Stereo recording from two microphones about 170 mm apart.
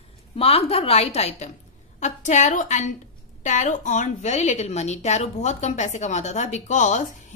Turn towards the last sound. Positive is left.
turn(degrees=45)  # may be behind; listen again after turning